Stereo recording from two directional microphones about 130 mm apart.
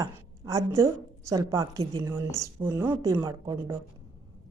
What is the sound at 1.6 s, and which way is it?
Speech, 40° right (ahead or behind).